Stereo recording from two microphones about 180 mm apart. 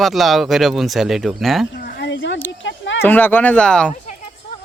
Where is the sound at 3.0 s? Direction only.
10° left (ahead or behind).